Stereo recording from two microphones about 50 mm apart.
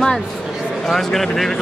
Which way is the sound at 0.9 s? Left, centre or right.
Centre.